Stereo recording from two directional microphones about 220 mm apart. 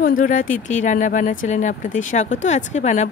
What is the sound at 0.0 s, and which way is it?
Speech, 40° left (ahead or behind).